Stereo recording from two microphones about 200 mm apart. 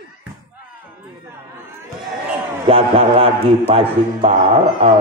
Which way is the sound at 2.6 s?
25° right (ahead or behind).